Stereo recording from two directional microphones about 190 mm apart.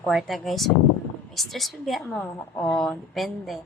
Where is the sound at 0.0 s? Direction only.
Centre (ahead or behind).